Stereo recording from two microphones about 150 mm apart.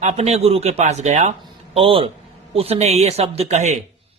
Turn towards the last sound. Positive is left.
turn(degrees=-50)  # may be behind; listen again after turning